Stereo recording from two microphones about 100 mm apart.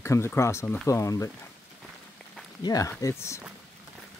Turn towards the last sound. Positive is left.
turn(degrees=30)  # may be behind; listen again after turning